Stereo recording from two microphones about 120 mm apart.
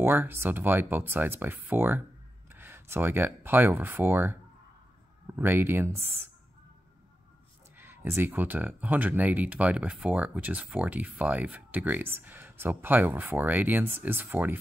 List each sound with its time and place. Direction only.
0.0 s speech: 20° right (ahead or behind)
7.7 s speech: 15° right (ahead or behind)